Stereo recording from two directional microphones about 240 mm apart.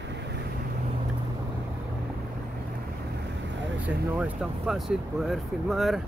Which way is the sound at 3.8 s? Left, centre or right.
Centre.